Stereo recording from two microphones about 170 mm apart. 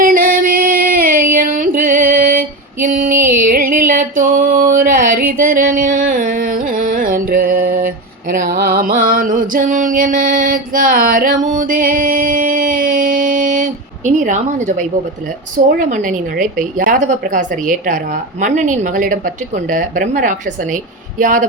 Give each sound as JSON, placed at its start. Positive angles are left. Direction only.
{"t": 0.0, "sound": "female singing", "side_deg": -55}
{"t": 3.2, "sound": "a sound", "side_deg": -55}
{"t": 15.5, "sound": "a woman's voice", "side_deg": -50}